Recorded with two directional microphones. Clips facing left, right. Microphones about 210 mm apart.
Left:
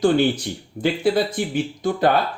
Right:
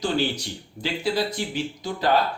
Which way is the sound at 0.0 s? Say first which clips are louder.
Left 7 dB; 55° left (ahead or behind).